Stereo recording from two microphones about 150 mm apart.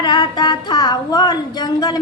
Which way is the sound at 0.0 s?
30° left (ahead or behind).